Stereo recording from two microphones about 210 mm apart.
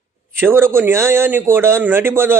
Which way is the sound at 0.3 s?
10° right (ahead or behind).